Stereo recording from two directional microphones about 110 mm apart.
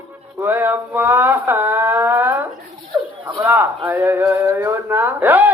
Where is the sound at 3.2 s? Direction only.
15° right (ahead or behind).